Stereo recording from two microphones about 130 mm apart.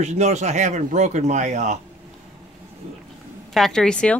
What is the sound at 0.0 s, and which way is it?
Speech, 65° right (ahead or behind).